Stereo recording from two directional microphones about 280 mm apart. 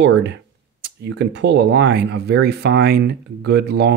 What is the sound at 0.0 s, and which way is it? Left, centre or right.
Speech, right.